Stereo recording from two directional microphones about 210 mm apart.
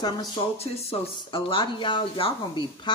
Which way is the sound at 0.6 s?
30° left (ahead or behind).